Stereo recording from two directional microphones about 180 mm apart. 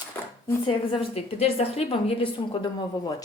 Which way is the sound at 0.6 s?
30° left (ahead or behind).